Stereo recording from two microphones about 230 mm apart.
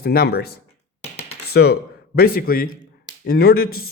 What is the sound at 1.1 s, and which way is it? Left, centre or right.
Computer keyboard, left.